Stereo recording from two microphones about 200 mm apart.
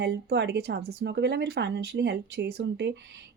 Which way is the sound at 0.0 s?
55° right (ahead or behind).